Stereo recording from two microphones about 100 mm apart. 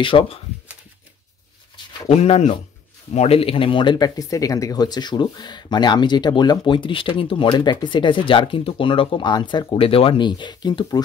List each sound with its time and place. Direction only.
0.0 s speech: 60° left (ahead or behind)
2.0 s speech: 90° left; by 11.0 s 45° left (ahead or behind)